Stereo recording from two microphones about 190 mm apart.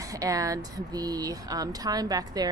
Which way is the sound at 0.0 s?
15° right (ahead or behind).